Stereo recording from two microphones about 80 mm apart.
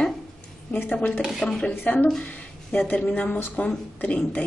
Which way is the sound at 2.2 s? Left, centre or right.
Centre.